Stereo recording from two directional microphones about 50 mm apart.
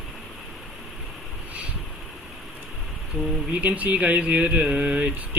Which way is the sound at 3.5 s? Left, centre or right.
Right.